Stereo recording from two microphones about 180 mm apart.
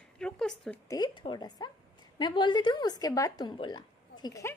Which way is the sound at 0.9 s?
25° left (ahead or behind).